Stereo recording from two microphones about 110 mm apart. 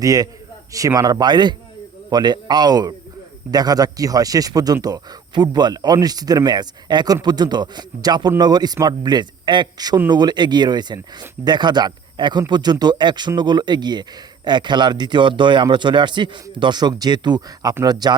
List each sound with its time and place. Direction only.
0.0 s speech: 30° right (ahead or behind)